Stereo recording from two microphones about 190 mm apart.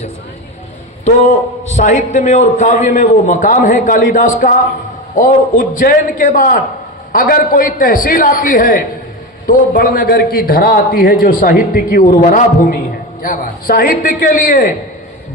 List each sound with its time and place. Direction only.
1.7 s a man's voice: 40° left (ahead or behind)